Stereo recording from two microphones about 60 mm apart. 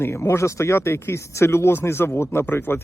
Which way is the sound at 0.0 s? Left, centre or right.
Left.